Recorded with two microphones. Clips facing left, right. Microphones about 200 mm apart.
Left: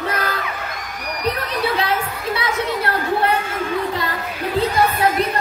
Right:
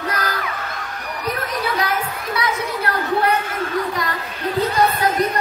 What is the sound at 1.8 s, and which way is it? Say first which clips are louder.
Chatter: left 1 dB; 25° left (ahead or behind).